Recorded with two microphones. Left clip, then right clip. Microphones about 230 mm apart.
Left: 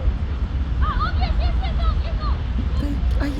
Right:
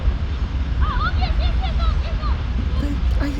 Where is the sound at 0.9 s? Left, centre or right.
Centre.